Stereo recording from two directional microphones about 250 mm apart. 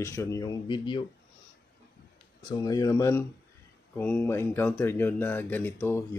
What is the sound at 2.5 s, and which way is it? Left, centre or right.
Speech, centre.